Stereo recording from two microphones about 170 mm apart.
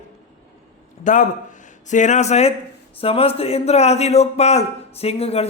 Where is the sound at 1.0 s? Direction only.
45° left (ahead or behind).